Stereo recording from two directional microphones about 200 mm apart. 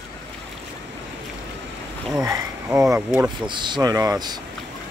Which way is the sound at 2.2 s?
15° right (ahead or behind).